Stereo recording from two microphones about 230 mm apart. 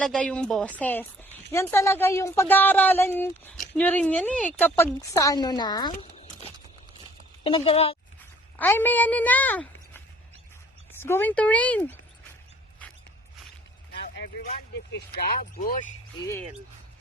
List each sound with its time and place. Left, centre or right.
0.0 s speech: centre
5.9 s a sound: left
7.4 s speech: left
8.5 s speech: centre
11.0 s speech: centre
14.9 s speech: left